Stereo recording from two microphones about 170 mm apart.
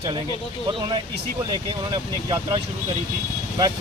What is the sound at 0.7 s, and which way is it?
Speech, 30° right (ahead or behind).